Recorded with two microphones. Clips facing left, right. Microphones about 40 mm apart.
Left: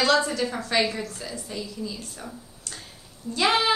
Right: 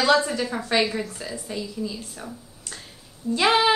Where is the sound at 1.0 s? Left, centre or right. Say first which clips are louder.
Right 2 dB; right.